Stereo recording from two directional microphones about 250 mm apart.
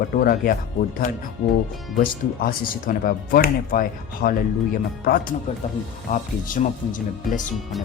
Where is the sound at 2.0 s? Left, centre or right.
Left.